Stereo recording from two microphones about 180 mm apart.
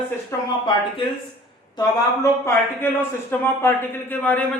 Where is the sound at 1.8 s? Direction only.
20° left (ahead or behind).